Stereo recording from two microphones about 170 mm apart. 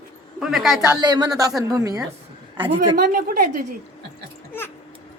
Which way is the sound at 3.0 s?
60° right (ahead or behind).